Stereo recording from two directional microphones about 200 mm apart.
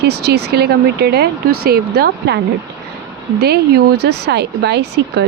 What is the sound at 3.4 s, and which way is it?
Speech, 55° right (ahead or behind).